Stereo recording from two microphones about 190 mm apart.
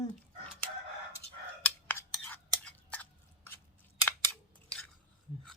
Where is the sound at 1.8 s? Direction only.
10° left (ahead or behind).